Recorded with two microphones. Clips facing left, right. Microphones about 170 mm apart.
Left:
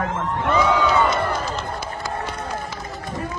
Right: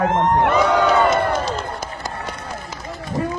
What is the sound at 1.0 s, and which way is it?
Speech, 65° right (ahead or behind).